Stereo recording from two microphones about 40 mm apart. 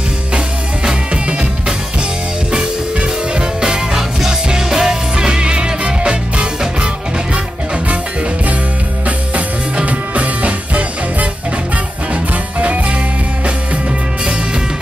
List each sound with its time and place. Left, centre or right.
0.8 s music: right
3.9 s music: centre; by 6.9 s right
9.0 s music: right